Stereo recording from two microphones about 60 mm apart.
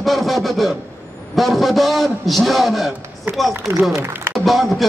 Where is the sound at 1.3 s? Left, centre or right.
Centre.